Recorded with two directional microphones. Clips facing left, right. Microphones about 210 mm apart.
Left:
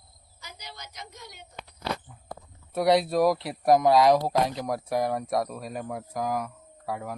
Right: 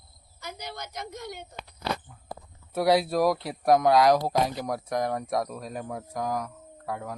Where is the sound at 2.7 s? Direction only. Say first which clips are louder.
Left 1 dB; centre (ahead or behind).